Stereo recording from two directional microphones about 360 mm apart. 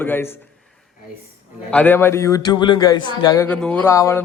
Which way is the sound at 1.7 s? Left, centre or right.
Centre.